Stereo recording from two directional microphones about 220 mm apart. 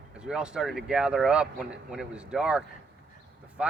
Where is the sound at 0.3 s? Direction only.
5° right (ahead or behind).